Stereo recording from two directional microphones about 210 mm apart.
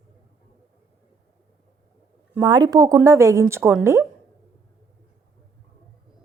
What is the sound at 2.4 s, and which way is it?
A woman's voice, 20° right (ahead or behind).